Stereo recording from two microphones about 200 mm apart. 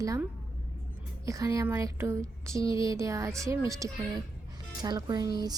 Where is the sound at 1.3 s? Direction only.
15° right (ahead or behind).